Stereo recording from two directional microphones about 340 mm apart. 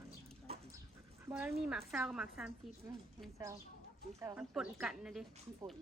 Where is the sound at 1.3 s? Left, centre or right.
Centre.